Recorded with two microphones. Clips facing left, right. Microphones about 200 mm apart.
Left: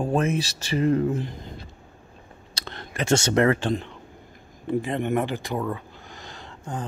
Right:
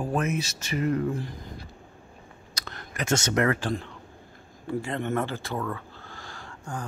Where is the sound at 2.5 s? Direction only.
25° left (ahead or behind).